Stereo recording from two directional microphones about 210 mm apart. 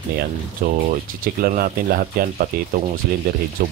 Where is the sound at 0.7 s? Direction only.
45° right (ahead or behind).